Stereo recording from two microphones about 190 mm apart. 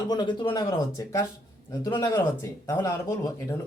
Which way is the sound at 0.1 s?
25° left (ahead or behind).